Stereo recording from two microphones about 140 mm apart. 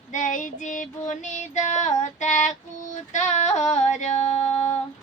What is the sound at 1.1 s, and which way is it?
Female singing, 60° left (ahead or behind).